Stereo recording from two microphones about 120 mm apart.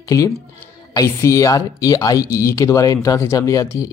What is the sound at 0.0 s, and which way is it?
Speech, 25° left (ahead or behind).